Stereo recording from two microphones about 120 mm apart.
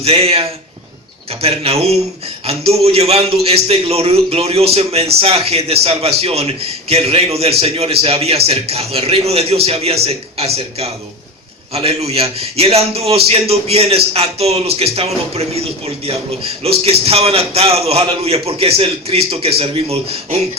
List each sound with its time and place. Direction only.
0.0 s a man's voice: 55° right (ahead or behind)